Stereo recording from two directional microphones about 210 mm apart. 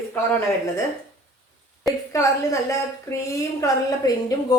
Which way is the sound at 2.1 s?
15° left (ahead or behind).